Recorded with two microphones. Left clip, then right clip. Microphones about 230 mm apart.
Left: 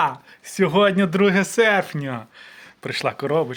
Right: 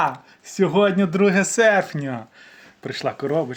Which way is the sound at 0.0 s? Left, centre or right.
Left.